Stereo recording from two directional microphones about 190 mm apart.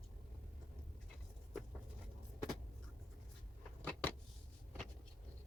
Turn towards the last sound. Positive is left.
turn(degrees=10)  # may be behind; listen again after turning